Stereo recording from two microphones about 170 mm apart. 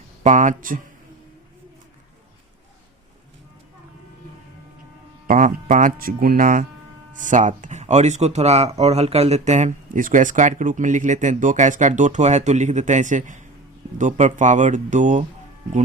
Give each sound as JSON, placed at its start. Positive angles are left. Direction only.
{"t": 0.2, "sound": "speech", "side_deg": -45}
{"t": 5.3, "sound": "speech", "side_deg": -50}